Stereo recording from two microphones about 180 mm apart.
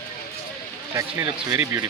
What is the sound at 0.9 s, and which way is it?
Speech, 15° right (ahead or behind).